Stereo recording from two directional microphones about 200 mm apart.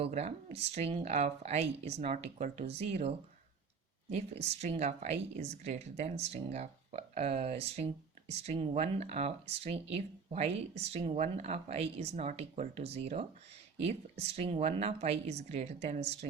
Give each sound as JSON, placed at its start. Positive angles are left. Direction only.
{"t": 0.0, "sound": "speech", "side_deg": -35}
{"t": 4.4, "sound": "speech", "side_deg": -30}